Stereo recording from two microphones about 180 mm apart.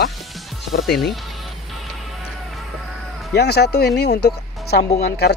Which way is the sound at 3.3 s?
65° left (ahead or behind).